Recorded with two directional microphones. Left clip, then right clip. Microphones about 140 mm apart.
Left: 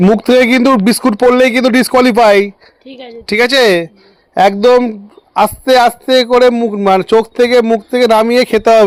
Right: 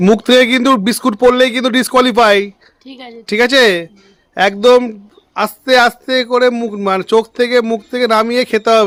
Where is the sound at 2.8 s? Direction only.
45° right (ahead or behind).